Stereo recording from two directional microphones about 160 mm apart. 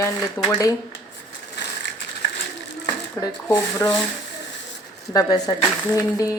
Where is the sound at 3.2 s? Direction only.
25° left (ahead or behind).